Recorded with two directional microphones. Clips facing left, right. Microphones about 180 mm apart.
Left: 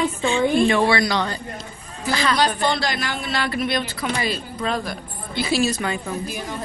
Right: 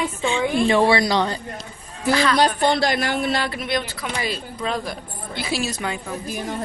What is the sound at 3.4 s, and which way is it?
Speech, 15° right (ahead or behind).